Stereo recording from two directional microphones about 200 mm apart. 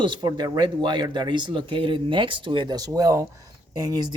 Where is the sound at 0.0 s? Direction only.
25° right (ahead or behind).